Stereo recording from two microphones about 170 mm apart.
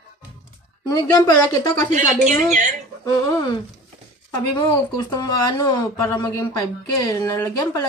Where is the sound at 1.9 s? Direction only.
45° right (ahead or behind).